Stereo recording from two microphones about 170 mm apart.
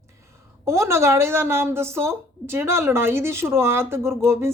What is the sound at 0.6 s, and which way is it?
A woman's voice, 15° right (ahead or behind).